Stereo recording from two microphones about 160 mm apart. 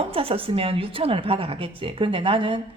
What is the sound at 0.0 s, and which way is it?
Speech, 35° right (ahead or behind).